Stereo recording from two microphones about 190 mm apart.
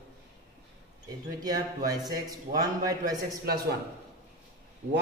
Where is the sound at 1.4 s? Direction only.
20° right (ahead or behind).